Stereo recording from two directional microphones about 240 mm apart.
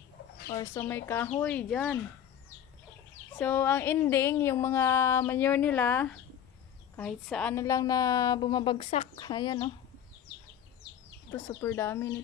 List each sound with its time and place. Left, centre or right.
0.5 s speech: centre
3.3 s speech: centre
11.6 s speech: centre